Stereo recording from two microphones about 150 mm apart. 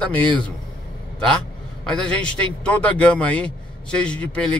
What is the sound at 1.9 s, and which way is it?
A man's voice, 5° left (ahead or behind).